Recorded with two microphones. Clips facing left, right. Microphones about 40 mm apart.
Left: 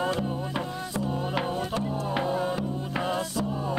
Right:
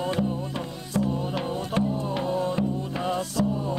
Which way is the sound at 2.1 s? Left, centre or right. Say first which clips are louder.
Right 1 dB; centre.